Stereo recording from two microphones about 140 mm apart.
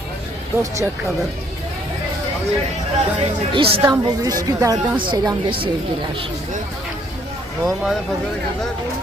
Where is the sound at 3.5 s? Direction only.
40° right (ahead or behind).